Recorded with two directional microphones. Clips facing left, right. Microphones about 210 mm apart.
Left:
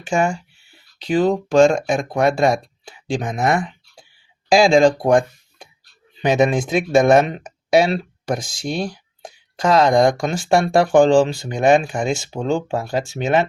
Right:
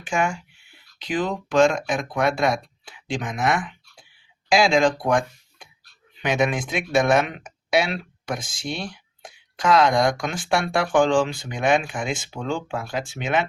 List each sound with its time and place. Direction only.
0.1 s speech: 40° left (ahead or behind)
1.5 s speech: 30° left (ahead or behind)
4.5 s speech: 30° left (ahead or behind)
6.2 s speech: 35° left (ahead or behind)